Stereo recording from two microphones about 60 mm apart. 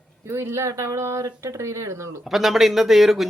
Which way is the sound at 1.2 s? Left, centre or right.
Right.